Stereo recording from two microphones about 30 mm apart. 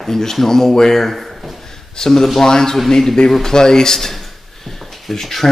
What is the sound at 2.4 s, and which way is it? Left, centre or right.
Speech, centre.